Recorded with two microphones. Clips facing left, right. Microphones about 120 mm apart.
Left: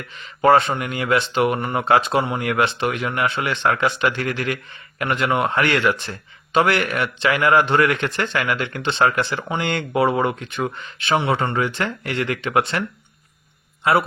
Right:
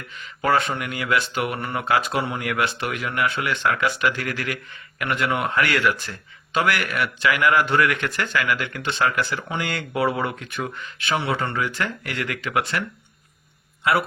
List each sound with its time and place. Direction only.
0.4 s speech: 25° left (ahead or behind)